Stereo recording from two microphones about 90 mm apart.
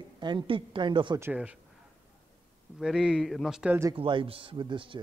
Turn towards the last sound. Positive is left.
turn(degrees=-70)  # may be behind; listen again after turning